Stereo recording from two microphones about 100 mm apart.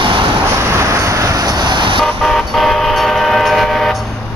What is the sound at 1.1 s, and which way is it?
Vehicle, 35° right (ahead or behind).